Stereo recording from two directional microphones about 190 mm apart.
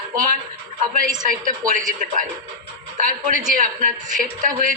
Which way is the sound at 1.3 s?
45° right (ahead or behind).